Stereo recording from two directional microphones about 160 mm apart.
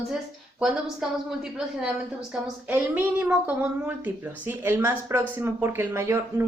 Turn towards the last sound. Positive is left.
turn(degrees=-15)  # may be behind; listen again after turning